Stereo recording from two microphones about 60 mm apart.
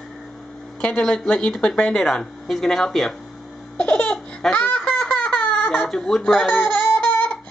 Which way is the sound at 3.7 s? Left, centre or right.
Left.